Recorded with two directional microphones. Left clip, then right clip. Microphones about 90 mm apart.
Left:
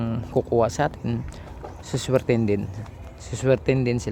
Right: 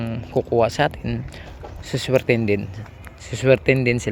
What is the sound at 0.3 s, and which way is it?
Speech, 15° left (ahead or behind).